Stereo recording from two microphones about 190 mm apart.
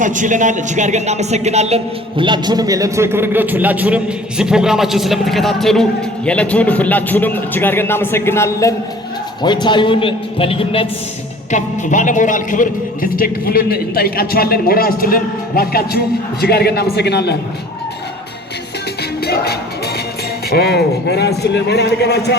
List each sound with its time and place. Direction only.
0.0 s a man's voice: 40° right (ahead or behind); by 10.8 s 30° left (ahead or behind)
11.5 s a man's voice: 40° left (ahead or behind); by 17.3 s 60° left (ahead or behind)
19.2 s music: 55° left (ahead or behind)
20.5 s a man's voice: 55° left (ahead or behind)